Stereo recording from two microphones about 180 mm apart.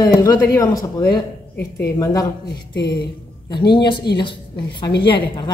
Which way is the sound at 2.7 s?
65° left (ahead or behind).